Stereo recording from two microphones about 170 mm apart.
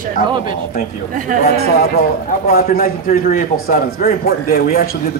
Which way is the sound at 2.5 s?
60° left (ahead or behind).